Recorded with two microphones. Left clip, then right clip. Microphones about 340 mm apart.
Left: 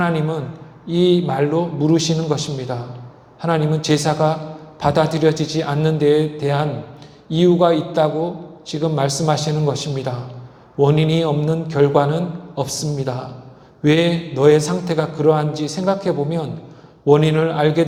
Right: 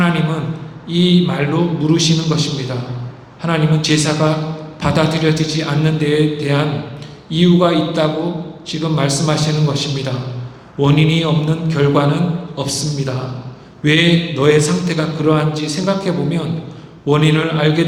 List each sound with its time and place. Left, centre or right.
0.9 s a man's voice: left